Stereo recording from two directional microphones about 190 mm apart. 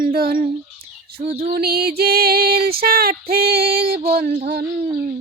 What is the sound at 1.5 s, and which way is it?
Female singing, 55° right (ahead or behind).